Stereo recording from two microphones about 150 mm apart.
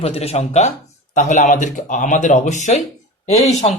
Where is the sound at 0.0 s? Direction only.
45° left (ahead or behind).